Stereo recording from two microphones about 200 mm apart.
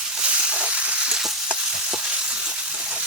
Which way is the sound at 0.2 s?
5° right (ahead or behind).